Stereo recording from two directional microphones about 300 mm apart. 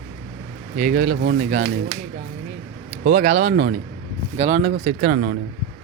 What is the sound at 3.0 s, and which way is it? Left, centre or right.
Speech, right.